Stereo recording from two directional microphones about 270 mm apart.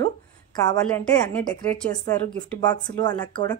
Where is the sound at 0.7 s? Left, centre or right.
Centre.